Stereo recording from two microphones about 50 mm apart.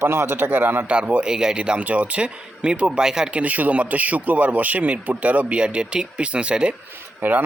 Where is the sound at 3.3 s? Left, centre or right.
Right.